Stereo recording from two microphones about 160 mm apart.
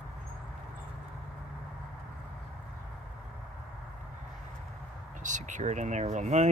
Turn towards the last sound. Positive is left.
turn(degrees=-50)  # may be behind; listen again after turning